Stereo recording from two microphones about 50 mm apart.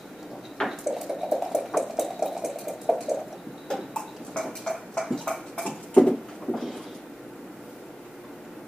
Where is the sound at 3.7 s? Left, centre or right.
Centre.